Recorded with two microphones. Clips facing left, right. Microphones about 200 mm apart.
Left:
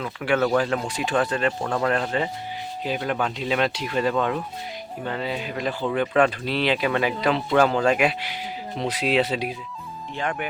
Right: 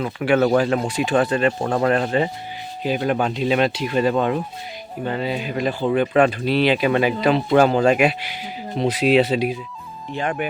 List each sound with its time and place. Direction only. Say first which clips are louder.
0.0 s a man's voice: right 5 dB; 20° right (ahead or behind)
1.6 s speech: right 4 dB; 30° right (ahead or behind)
1.9 s a man's voice: right 5 dB; 20° right (ahead or behind)
5.0 s speech: right 4 dB; 10° right (ahead or behind)